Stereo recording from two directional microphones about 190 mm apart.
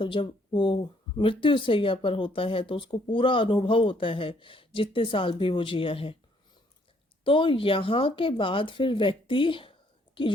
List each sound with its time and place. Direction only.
0.0 s speech: 25° left (ahead or behind)
7.3 s speech: 25° left (ahead or behind)